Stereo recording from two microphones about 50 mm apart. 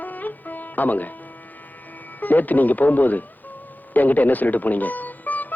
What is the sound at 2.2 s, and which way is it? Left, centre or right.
Speech, left.